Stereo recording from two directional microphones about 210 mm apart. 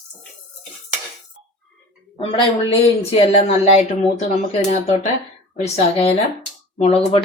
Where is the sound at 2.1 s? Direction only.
25° left (ahead or behind).